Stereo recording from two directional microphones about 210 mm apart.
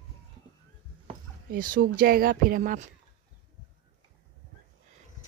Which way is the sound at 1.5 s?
40° right (ahead or behind).